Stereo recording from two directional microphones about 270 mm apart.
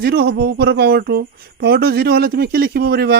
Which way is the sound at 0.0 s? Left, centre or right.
Right.